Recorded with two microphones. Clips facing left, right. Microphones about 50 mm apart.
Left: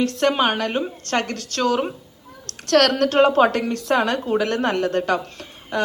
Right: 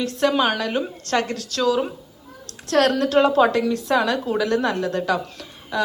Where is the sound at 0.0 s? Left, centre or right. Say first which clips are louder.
Left 1 dB; left.